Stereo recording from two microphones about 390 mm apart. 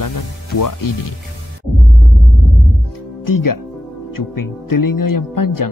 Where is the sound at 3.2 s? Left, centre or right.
Left.